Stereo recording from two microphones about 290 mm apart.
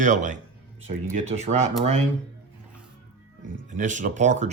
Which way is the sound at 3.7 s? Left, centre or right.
Right.